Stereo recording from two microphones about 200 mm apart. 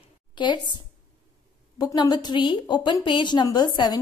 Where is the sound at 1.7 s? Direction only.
20° left (ahead or behind).